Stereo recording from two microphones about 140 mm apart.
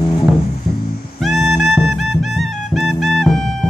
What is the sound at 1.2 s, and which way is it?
Music, centre (ahead or behind).